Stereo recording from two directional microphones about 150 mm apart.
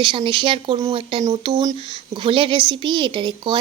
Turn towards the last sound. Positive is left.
turn(degrees=-30)  # may be behind; listen again after turning